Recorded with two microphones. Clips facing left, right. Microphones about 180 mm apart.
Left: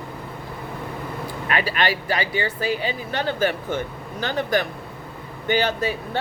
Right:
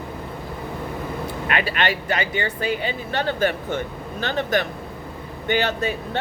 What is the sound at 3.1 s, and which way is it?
Speech, 50° right (ahead or behind).